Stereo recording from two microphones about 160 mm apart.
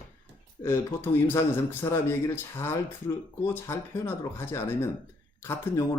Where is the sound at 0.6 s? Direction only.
15° left (ahead or behind).